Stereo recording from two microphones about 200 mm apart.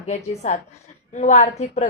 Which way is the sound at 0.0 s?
35° left (ahead or behind).